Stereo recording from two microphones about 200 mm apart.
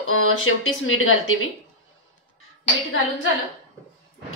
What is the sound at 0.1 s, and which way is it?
Speech, 90° left.